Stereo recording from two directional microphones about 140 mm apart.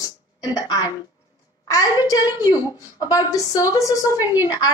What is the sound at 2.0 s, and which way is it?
A woman's voice, 25° left (ahead or behind).